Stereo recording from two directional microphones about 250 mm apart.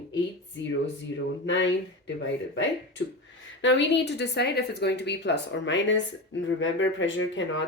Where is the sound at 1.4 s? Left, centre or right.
Left.